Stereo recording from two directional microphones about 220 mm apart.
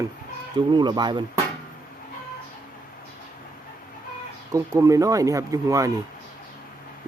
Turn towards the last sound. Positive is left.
turn(degrees=-15)  # may be behind; listen again after turning